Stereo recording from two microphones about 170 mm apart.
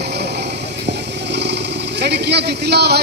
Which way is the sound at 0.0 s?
80° right.